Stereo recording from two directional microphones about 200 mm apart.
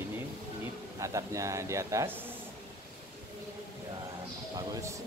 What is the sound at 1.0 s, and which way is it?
Speech, 15° right (ahead or behind).